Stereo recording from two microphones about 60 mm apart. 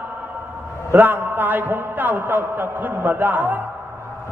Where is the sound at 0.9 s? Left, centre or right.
Right.